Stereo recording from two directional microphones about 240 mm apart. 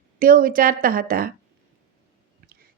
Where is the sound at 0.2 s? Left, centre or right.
Right.